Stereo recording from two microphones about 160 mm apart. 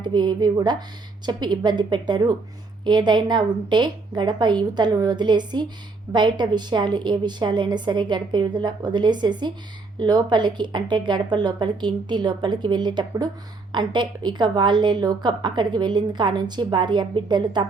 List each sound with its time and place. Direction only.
0.0 s a woman's voice: 25° right (ahead or behind)